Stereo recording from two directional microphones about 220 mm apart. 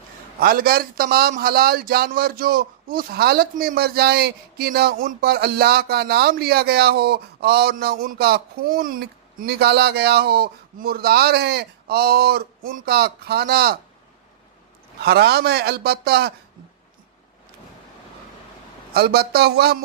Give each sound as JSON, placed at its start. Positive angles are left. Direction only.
{"t": 0.3, "sound": "a man's voice", "side_deg": -40}
{"t": 15.0, "sound": "a man's voice", "side_deg": -45}
{"t": 18.9, "sound": "a man's voice", "side_deg": -45}